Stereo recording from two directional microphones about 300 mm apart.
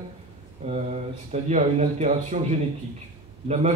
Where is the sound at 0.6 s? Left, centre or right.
Centre.